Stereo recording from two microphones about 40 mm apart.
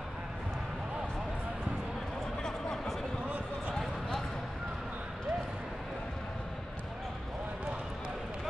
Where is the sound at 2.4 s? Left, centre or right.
Centre.